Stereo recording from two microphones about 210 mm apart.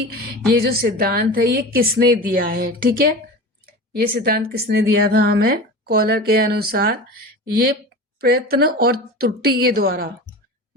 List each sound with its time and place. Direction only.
0.1 s a woman's voice: 45° right (ahead or behind)